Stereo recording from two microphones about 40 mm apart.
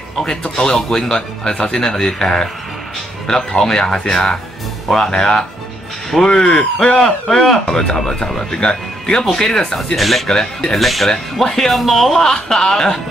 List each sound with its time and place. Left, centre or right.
0.6 s speech: centre
9.8 s speech: centre
10.2 s speech: centre
10.8 s speech: centre